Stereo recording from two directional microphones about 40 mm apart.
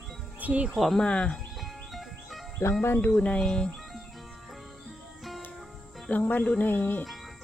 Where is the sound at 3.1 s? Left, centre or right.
Left.